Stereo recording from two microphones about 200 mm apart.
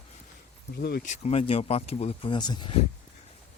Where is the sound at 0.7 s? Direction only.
55° left (ahead or behind).